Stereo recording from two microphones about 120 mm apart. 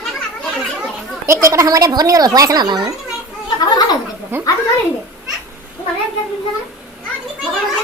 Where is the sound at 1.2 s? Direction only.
25° right (ahead or behind).